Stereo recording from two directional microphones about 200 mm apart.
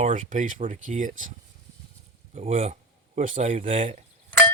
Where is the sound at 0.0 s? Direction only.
40° right (ahead or behind).